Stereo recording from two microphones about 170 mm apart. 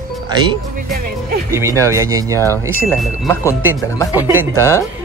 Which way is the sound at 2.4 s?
15° left (ahead or behind).